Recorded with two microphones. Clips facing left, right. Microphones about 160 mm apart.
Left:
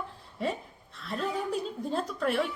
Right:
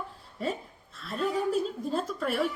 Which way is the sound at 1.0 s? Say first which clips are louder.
Right 3 dB; centre (ahead or behind).